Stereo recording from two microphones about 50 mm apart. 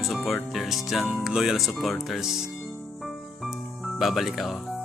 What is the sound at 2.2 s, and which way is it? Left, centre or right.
Speech, centre.